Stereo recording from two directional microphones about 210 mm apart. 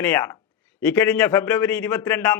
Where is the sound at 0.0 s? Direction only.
15° left (ahead or behind).